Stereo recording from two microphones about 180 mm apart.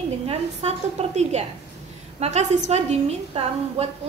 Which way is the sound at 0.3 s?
35° right (ahead or behind).